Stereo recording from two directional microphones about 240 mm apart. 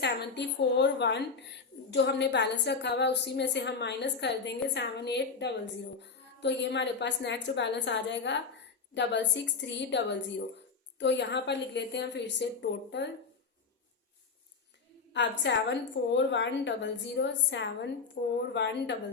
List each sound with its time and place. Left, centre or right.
0.0 s a woman's voice: left
15.1 s a woman's voice: left
18.2 s a woman's voice: left
18.5 s a woman's voice: left